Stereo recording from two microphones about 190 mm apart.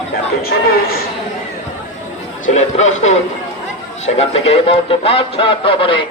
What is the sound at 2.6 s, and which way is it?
Speech, 40° left (ahead or behind).